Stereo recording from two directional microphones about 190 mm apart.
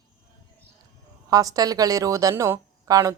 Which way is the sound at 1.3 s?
20° right (ahead or behind).